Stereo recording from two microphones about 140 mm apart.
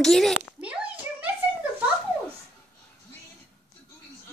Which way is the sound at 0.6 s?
10° right (ahead or behind).